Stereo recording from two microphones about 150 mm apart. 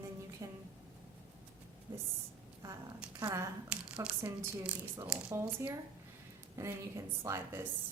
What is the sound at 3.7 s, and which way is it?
Speech, 5° right (ahead or behind).